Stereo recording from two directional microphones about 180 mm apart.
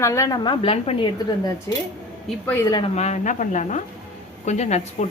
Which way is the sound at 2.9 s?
40° left (ahead or behind).